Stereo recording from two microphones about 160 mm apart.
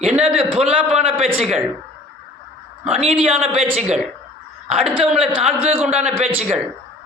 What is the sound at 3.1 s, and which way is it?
Speech, 10° right (ahead or behind).